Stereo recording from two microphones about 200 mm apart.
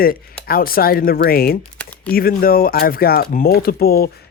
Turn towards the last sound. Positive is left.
turn(degrees=50)  # may be behind; listen again after turning